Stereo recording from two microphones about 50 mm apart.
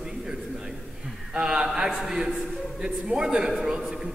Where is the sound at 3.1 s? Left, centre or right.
Centre.